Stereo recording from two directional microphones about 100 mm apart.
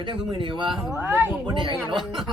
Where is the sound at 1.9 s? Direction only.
Centre (ahead or behind).